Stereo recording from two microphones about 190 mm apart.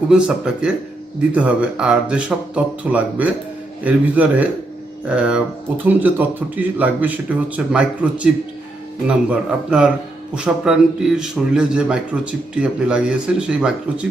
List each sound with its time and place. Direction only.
0.1 s a man's voice: 5° right (ahead or behind)
3.8 s a man's voice: 10° right (ahead or behind)